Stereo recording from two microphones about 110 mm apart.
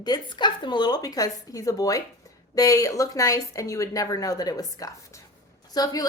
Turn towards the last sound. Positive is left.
turn(degrees=40)  # may be behind; listen again after turning